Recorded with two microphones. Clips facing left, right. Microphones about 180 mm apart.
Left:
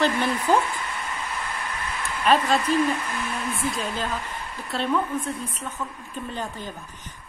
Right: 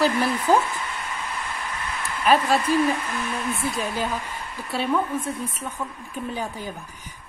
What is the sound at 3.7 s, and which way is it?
A woman's voice, 10° right (ahead or behind).